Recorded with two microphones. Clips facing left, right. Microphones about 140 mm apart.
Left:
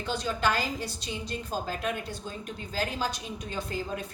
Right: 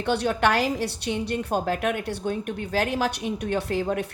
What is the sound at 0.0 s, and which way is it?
A woman's voice, 65° right (ahead or behind).